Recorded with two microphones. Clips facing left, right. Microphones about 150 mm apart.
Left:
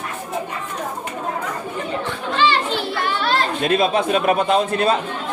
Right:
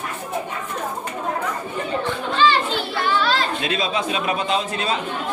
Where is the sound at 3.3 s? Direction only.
55° left (ahead or behind).